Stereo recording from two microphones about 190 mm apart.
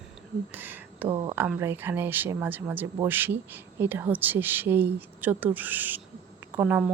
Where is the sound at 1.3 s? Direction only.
10° right (ahead or behind).